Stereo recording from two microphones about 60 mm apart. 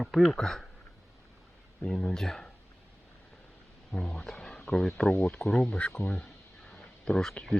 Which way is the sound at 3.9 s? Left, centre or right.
Centre.